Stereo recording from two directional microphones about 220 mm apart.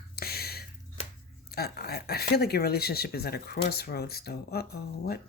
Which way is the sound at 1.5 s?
45° left (ahead or behind).